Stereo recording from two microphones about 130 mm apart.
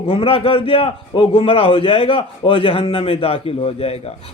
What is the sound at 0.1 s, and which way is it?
A man's voice, 45° left (ahead or behind).